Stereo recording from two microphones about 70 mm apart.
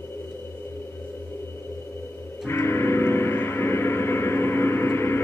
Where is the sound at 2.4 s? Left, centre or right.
Left.